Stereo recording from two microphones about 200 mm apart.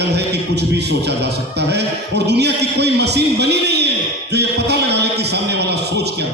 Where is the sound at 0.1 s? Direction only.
55° right (ahead or behind).